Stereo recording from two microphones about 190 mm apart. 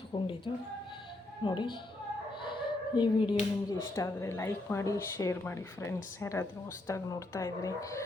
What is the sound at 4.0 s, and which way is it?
A woman's voice, 15° left (ahead or behind).